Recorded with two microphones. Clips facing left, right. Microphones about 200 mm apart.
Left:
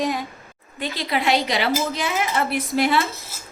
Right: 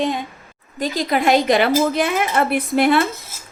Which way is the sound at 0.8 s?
40° right (ahead or behind).